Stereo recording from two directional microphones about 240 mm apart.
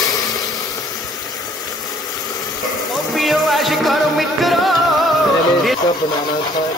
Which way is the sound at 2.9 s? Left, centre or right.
Centre.